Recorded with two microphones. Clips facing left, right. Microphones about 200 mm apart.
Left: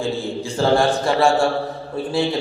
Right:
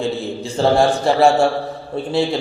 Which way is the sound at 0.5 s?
25° right (ahead or behind).